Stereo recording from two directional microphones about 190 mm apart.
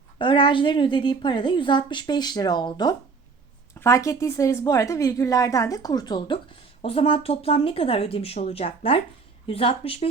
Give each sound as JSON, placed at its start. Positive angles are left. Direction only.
{"t": 0.2, "sound": "a woman's voice", "side_deg": 25}